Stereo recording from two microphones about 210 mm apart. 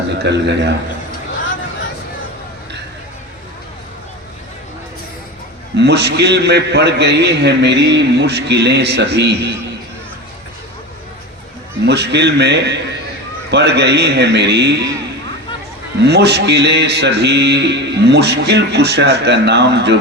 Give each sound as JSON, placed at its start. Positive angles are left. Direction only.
{"t": 0.2, "sound": "a man's voice", "side_deg": -55}
{"t": 5.7, "sound": "a man's voice", "side_deg": -55}
{"t": 11.9, "sound": "a man's voice", "side_deg": -55}
{"t": 16.0, "sound": "a man's voice", "side_deg": -50}